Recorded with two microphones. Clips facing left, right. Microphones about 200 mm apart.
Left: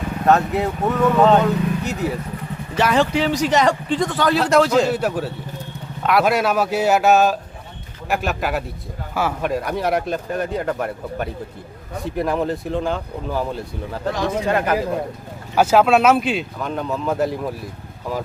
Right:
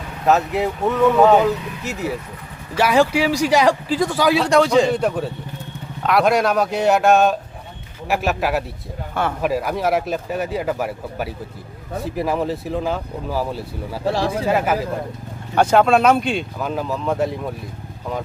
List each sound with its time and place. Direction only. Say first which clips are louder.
0.3 s speech: even; centre (ahead or behind)
14.1 s speech: right 2 dB; 30° right (ahead or behind)
14.4 s speech: left 1 dB; 5° right (ahead or behind)